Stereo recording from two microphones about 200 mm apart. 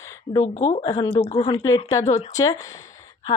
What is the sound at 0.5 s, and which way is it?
Speech, 30° left (ahead or behind).